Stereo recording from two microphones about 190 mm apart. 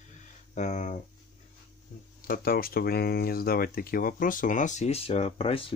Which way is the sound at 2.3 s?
50° left (ahead or behind).